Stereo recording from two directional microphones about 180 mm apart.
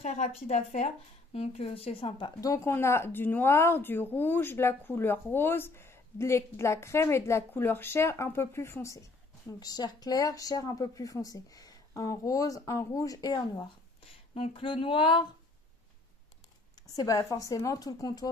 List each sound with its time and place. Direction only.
0.0 s a woman's voice: 40° left (ahead or behind); by 13.4 s 20° left (ahead or behind)
14.3 s speech: 30° left (ahead or behind)
16.8 s speech: 20° left (ahead or behind)